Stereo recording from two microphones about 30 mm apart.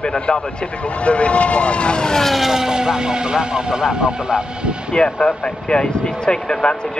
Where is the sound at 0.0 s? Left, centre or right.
Left.